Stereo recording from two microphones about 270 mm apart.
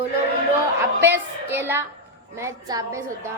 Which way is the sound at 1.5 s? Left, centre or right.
Centre.